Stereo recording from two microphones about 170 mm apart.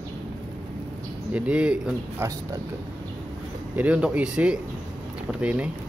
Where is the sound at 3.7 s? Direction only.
10° right (ahead or behind).